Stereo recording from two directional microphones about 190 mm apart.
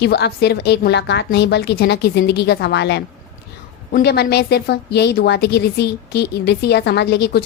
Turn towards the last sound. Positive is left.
turn(degrees=60)  # may be behind; listen again after turning